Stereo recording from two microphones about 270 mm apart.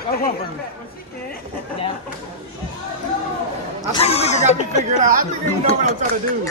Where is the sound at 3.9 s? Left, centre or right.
Left.